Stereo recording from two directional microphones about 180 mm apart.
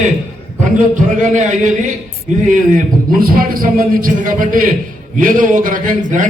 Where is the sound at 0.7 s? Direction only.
45° right (ahead or behind).